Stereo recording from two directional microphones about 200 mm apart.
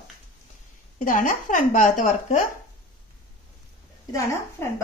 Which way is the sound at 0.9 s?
40° left (ahead or behind).